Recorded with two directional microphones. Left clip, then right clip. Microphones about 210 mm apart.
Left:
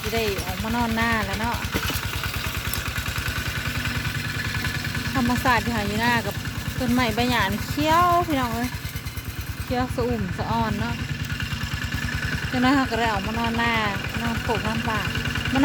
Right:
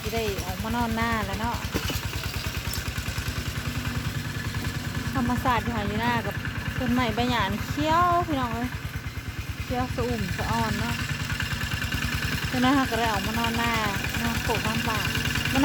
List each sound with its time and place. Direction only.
0.8 s speech: 10° left (ahead or behind)
5.1 s speech: 20° left (ahead or behind)
12.5 s speech: 10° left (ahead or behind)
14.2 s speech: 50° right (ahead or behind)